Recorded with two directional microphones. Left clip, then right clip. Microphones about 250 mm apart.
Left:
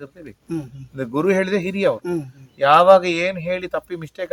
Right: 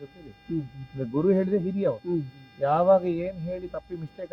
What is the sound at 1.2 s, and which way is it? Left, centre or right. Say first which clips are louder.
Speech: left 5 dB; centre.